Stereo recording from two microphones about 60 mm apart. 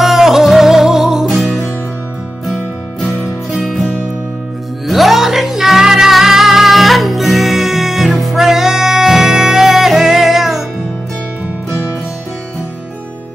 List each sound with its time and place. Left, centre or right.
0.0 s music: centre
3.6 s music: centre